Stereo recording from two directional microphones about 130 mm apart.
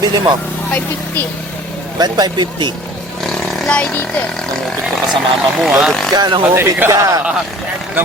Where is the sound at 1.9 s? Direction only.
30° right (ahead or behind).